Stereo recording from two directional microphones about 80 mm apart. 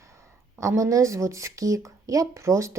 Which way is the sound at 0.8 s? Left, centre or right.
Right.